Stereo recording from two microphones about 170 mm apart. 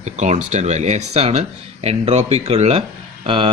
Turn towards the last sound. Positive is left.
turn(degrees=-30)  # may be behind; listen again after turning